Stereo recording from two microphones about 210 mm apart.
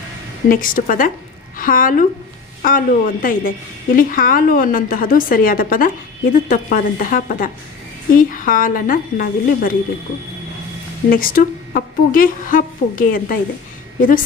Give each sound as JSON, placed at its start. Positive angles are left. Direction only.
{"t": 0.4, "sound": "a woman's voice", "side_deg": 40}
{"t": 11.1, "sound": "a woman's voice", "side_deg": 40}